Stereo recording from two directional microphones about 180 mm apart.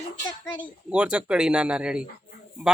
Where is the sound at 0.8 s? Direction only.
5° right (ahead or behind).